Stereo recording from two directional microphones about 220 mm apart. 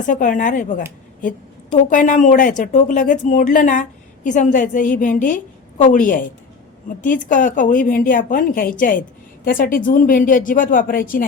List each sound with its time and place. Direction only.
0.1 s speech: 35° left (ahead or behind)
1.7 s speech: 35° left (ahead or behind)